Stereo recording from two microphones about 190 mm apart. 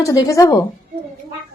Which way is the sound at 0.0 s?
15° left (ahead or behind).